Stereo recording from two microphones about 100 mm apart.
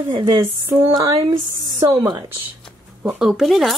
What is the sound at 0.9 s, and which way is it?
Speech, 35° right (ahead or behind).